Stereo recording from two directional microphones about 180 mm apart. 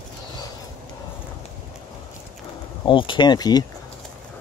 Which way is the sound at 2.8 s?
25° left (ahead or behind).